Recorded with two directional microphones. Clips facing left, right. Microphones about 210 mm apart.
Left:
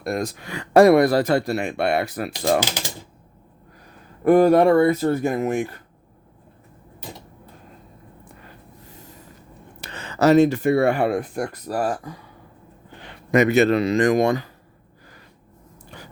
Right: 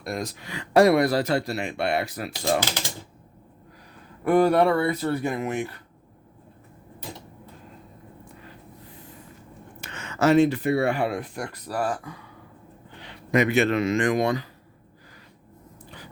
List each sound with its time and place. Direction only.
0.0 s speech: 50° left (ahead or behind)
4.2 s speech: 45° left (ahead or behind)
9.8 s speech: 35° left (ahead or behind)